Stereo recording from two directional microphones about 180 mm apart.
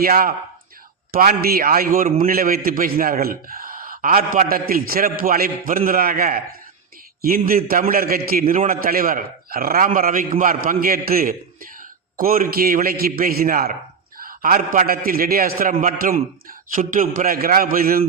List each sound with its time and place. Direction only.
0.0 s a man's voice: 55° right (ahead or behind)